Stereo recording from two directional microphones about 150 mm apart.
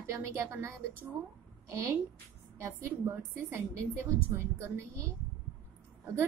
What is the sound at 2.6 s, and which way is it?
A woman's voice, 15° right (ahead or behind).